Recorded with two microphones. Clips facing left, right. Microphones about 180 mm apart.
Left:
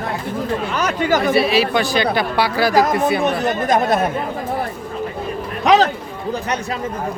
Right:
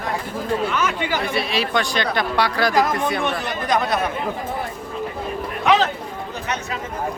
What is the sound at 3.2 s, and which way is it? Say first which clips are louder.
Speech: left 6 dB; 45° left (ahead or behind).